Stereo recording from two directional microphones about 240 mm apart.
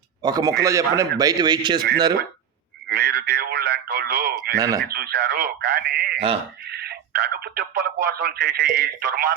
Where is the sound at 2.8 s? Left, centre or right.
Right.